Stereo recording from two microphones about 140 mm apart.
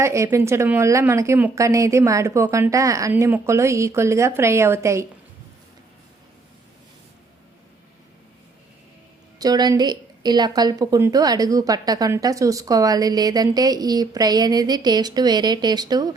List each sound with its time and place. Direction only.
0.0 s a woman's voice: 20° right (ahead or behind)
9.4 s a woman's voice: 25° right (ahead or behind)